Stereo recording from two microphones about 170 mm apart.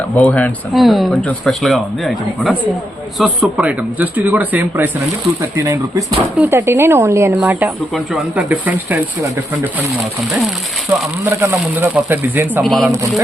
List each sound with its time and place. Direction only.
0.2 s speech: 10° left (ahead or behind); by 9.8 s 20° right (ahead or behind)
11.3 s speech: 15° right (ahead or behind)
12.6 s speech: centre (ahead or behind)